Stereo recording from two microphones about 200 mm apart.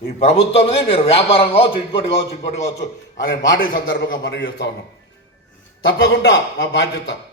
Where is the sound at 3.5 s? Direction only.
55° left (ahead or behind).